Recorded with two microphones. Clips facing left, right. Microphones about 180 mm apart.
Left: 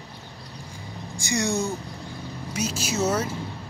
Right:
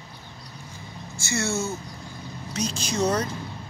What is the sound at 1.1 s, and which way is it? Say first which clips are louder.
Speech: left 2 dB; 15° left (ahead or behind).